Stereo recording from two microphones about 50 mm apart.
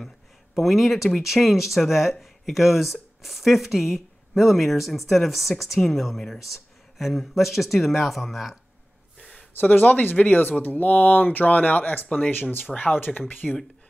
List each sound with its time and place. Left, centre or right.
0.6 s speech: centre
9.2 s a sound: left
9.6 s speech: left